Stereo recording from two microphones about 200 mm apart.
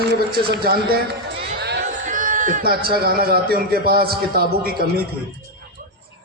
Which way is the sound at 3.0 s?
50° right (ahead or behind).